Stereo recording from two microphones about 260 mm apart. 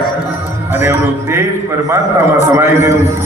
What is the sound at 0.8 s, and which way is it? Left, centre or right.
Speech, centre.